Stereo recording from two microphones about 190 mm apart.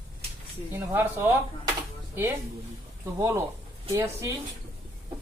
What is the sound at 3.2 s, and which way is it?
Speech, 15° right (ahead or behind).